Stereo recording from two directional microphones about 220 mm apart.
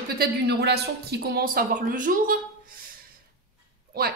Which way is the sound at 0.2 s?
50° right (ahead or behind).